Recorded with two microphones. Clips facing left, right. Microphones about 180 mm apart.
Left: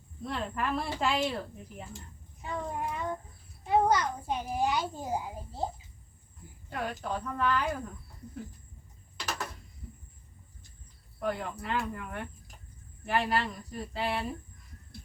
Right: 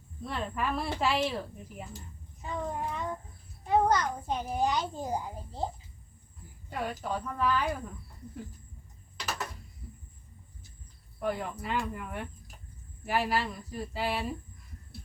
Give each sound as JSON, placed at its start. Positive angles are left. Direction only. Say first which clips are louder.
{"t": 0.2, "sound": "a child's voice", "louder": "even", "side_deg": 0}
{"t": 6.7, "sound": "speech", "louder": "right 1 dB", "side_deg": -5}
{"t": 11.2, "sound": "speech", "louder": "right 1 dB", "side_deg": -5}